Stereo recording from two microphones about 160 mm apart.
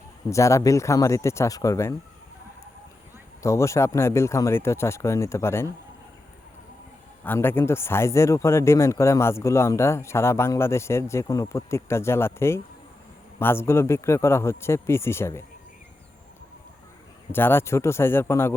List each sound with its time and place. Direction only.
0.3 s speech: 20° left (ahead or behind)
3.4 s speech: 20° left (ahead or behind)
7.3 s speech: 15° left (ahead or behind)
17.3 s speech: 15° left (ahead or behind)